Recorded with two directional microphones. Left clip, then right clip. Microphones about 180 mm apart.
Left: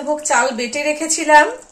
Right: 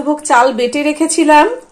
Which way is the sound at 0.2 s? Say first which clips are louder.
Right 9 dB; 40° right (ahead or behind).